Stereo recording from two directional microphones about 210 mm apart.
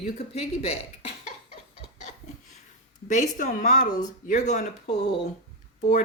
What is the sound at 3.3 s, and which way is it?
Speech, 40° left (ahead or behind).